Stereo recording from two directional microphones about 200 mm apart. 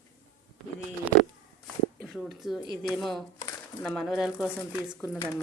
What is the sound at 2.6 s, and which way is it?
A woman's voice, centre (ahead or behind).